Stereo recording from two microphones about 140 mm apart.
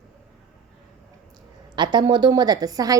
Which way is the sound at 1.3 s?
30° right (ahead or behind).